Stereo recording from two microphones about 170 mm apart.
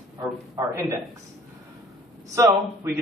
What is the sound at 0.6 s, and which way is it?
Speech, 15° right (ahead or behind).